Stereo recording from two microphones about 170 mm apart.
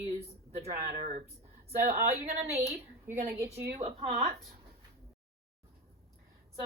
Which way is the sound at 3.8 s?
40° right (ahead or behind).